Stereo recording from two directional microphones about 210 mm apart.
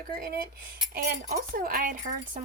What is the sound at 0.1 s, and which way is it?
Speech, 45° right (ahead or behind).